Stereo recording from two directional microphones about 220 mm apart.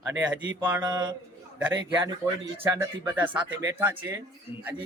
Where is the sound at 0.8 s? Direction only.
20° right (ahead or behind).